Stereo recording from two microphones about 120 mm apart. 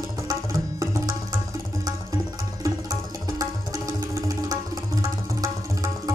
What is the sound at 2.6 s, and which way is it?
Music, 30° right (ahead or behind).